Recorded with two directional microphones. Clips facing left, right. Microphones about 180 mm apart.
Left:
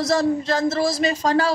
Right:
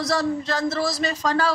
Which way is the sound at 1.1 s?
25° left (ahead or behind).